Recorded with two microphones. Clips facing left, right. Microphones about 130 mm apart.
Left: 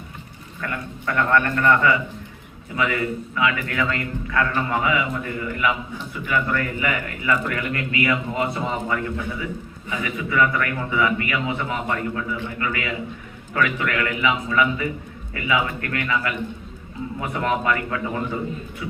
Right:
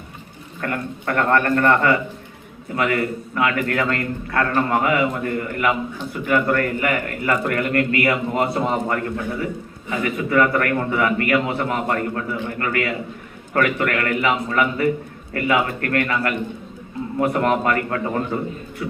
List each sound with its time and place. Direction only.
0.6 s a man's voice: 50° right (ahead or behind)